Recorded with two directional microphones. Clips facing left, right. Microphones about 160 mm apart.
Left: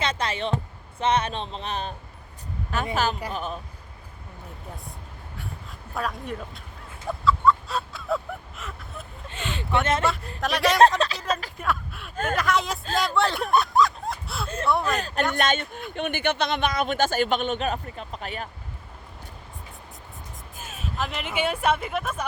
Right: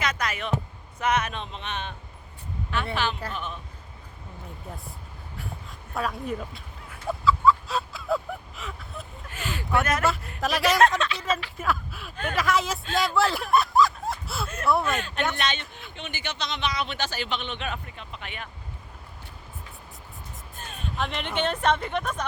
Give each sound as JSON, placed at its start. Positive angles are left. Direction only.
{"t": 0.0, "sound": "speech", "side_deg": 30}
{"t": 5.9, "sound": "a woman's voice", "side_deg": 0}
{"t": 7.1, "sound": "fowl", "side_deg": 0}
{"t": 9.3, "sound": "a sound", "side_deg": 25}
{"t": 10.4, "sound": "a woman's voice", "side_deg": 0}
{"t": 12.1, "sound": "speech", "side_deg": 45}
{"t": 12.4, "sound": "a woman's voice", "side_deg": 0}
{"t": 12.9, "sound": "a sound", "side_deg": 0}
{"t": 14.4, "sound": "speech", "side_deg": 30}
{"t": 14.7, "sound": "a woman's voice", "side_deg": 0}
{"t": 14.9, "sound": "speech", "side_deg": 40}
{"t": 20.6, "sound": "speech", "side_deg": 5}